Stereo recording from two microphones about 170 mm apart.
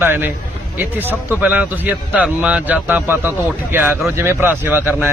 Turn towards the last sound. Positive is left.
turn(degrees=-10)  # may be behind; listen again after turning